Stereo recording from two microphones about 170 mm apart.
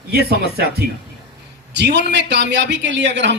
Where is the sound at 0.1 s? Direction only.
65° right (ahead or behind).